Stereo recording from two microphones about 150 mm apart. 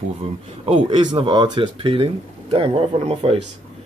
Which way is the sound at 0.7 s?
30° right (ahead or behind).